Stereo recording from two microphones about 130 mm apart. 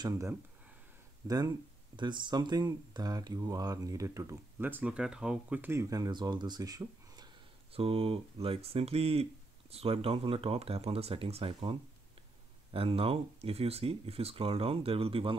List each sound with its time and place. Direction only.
0.0 s speech: 25° right (ahead or behind)
7.7 s speech: 45° right (ahead or behind)
12.7 s speech: 45° right (ahead or behind)